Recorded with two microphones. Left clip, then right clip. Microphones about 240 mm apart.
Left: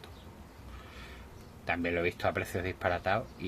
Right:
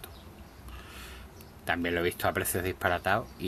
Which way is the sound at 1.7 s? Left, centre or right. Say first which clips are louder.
Right 2 dB; centre.